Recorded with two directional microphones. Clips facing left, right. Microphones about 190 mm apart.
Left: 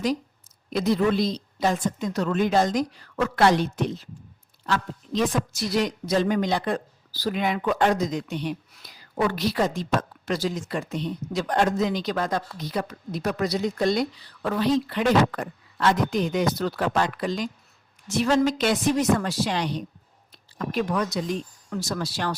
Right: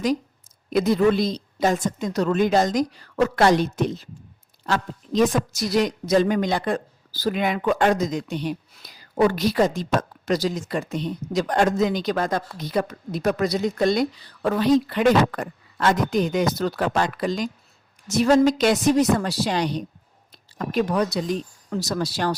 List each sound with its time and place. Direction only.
0.8 s speech: 50° right (ahead or behind)